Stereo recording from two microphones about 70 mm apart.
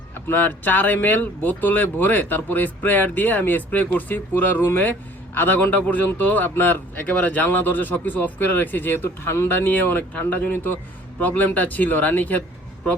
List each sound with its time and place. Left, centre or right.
0.1 s speech: left